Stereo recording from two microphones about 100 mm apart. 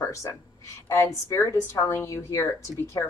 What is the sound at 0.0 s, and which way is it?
A woman's voice, 30° left (ahead or behind).